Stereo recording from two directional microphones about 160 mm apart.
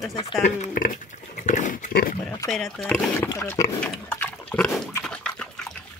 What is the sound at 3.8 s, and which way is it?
Pig, 10° left (ahead or behind).